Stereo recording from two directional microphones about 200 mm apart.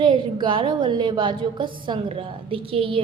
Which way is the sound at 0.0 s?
25° right (ahead or behind).